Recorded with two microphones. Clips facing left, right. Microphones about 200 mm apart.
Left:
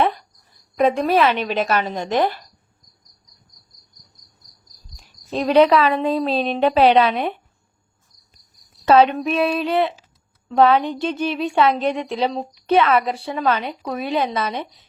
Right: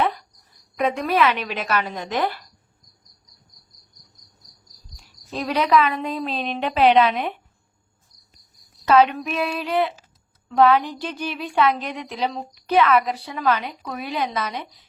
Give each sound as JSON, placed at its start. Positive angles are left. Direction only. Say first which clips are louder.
{"t": 0.8, "sound": "a woman's voice", "louder": "left 4 dB", "side_deg": 30}
{"t": 5.3, "sound": "a woman's voice", "louder": "left 6 dB", "side_deg": 25}
{"t": 8.8, "sound": "a woman's voice", "louder": "left 3 dB", "side_deg": 30}